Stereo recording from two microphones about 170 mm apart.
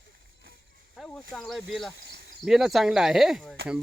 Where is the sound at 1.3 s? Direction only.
Centre (ahead or behind).